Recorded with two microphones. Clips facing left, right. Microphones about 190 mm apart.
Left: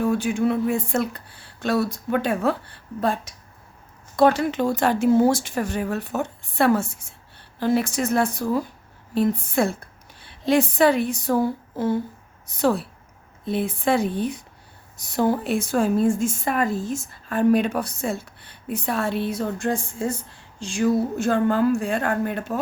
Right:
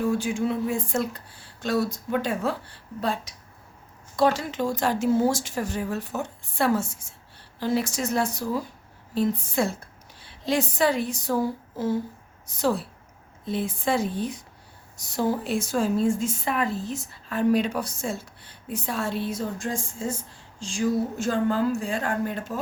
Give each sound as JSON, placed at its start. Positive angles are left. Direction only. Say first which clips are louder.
{"t": 0.0, "sound": "a woman's voice", "louder": "left 3 dB", "side_deg": 60}